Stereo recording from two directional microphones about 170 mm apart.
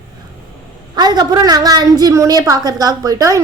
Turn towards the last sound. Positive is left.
turn(degrees=-20)  # may be behind; listen again after turning